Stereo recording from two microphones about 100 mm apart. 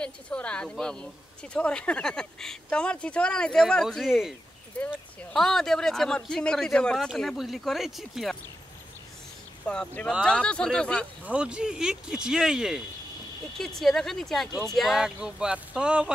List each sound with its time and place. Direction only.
0.0 s speech: 10° left (ahead or behind)
4.7 s speech: 15° left (ahead or behind)
9.7 s speech: 10° left (ahead or behind)
11.2 s speech: 10° right (ahead or behind)